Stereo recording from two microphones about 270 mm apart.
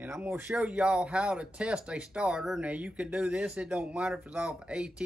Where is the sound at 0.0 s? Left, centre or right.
Centre.